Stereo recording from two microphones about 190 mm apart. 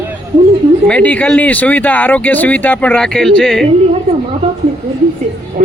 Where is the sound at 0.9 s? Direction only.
10° left (ahead or behind).